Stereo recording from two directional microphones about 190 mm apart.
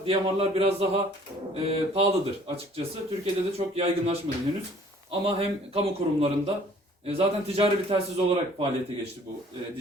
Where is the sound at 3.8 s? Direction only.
35° right (ahead or behind).